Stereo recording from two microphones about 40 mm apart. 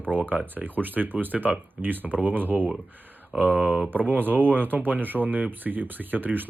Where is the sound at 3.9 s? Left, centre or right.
Right.